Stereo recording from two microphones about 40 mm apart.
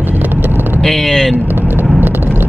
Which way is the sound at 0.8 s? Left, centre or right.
Centre.